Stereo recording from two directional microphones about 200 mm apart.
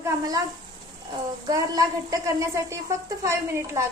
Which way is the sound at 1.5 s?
15° right (ahead or behind).